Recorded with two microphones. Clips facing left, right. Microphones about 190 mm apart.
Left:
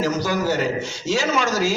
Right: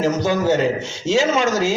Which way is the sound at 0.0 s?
25° right (ahead or behind).